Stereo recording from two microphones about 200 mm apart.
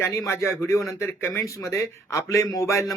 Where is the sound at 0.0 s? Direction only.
15° left (ahead or behind).